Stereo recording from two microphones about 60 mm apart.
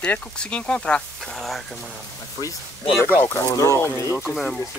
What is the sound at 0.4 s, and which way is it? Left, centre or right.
Speech, centre.